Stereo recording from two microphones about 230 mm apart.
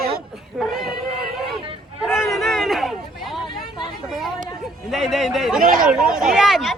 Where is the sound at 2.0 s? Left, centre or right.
Centre.